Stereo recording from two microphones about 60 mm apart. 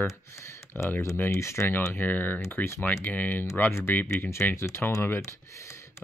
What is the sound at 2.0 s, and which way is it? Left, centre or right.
Speech, left.